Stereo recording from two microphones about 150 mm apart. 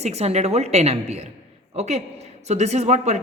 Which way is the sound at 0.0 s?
45° right (ahead or behind).